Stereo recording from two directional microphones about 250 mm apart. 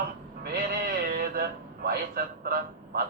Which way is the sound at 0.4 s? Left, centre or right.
Right.